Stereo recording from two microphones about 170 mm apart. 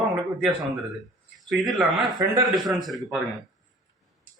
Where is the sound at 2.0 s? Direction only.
25° right (ahead or behind).